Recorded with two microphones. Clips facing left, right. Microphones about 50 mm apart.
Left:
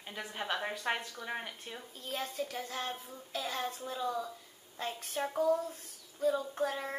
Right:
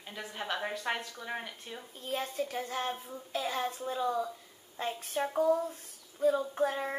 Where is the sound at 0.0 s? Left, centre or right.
Centre.